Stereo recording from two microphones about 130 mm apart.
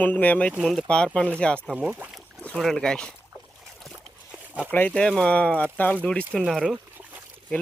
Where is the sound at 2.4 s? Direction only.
5° left (ahead or behind).